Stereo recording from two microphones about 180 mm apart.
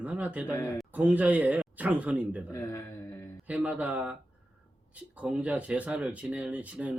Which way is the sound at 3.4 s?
5° right (ahead or behind).